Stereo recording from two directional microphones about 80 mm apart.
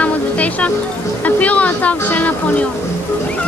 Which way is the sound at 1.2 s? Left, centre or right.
Centre.